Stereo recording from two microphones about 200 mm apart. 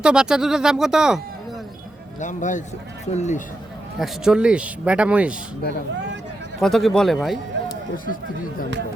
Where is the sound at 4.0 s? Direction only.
5° right (ahead or behind).